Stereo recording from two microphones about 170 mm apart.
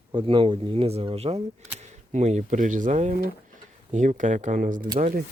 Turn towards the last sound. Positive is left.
turn(degrees=-50)  # may be behind; listen again after turning